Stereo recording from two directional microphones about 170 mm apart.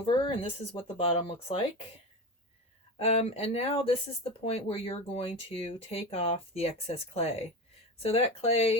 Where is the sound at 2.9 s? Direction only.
35° left (ahead or behind).